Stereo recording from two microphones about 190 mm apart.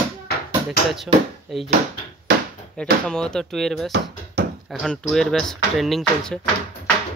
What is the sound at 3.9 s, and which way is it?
Bouncing, 60° right (ahead or behind).